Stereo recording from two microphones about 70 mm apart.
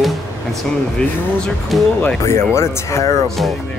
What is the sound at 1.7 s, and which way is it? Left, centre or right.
Speech, centre.